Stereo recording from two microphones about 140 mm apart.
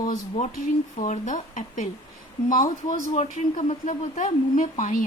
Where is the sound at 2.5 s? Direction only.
75° left (ahead or behind).